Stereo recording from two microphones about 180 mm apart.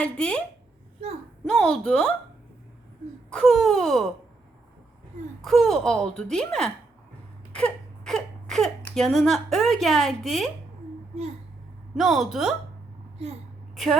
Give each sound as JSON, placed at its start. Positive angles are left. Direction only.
{"t": 0.0, "sound": "speech", "side_deg": 5}
{"t": 1.5, "sound": "speech", "side_deg": 5}
{"t": 3.3, "sound": "speech", "side_deg": 0}
{"t": 5.4, "sound": "speech", "side_deg": 0}
{"t": 11.9, "sound": "speech", "side_deg": 0}
{"t": 13.2, "sound": "a woman's voice", "side_deg": -35}